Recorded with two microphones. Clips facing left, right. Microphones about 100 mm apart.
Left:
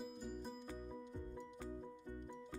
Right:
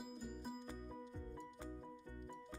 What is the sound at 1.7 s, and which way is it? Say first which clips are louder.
Music: left 3 dB; 20° left (ahead or behind).